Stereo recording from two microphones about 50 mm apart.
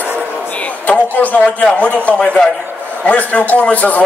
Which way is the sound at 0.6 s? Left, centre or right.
Left.